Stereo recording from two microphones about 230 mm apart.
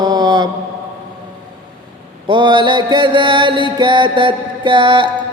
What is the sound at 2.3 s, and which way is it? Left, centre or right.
Mantra, right.